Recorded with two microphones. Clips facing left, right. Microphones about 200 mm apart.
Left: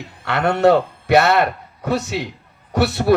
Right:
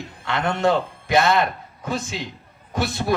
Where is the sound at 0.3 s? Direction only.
65° left (ahead or behind).